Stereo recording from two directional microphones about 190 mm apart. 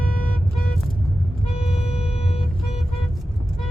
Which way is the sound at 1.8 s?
30° left (ahead or behind).